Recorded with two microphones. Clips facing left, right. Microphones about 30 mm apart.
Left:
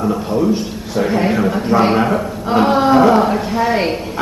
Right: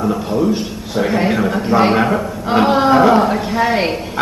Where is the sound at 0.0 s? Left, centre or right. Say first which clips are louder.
Even; centre.